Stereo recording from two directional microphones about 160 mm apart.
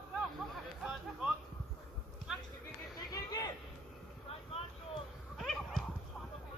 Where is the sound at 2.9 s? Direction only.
25° left (ahead or behind).